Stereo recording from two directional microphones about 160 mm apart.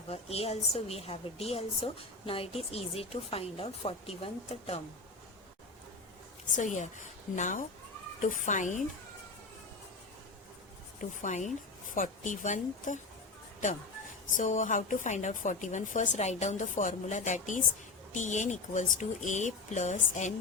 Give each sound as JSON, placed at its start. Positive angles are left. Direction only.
{"t": 0.1, "sound": "a woman's voice", "side_deg": 40}
{"t": 6.6, "sound": "a woman's voice", "side_deg": 50}
{"t": 11.2, "sound": "a woman's voice", "side_deg": 50}
{"t": 14.3, "sound": "a woman's voice", "side_deg": 55}